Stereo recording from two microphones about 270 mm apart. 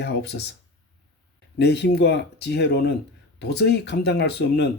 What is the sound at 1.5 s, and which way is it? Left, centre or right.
Speech, left.